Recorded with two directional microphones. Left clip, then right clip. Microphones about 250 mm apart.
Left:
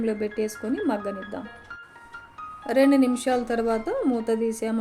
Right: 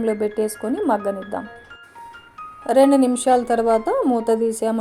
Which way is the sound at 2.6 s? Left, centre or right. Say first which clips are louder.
Right 5 dB; centre.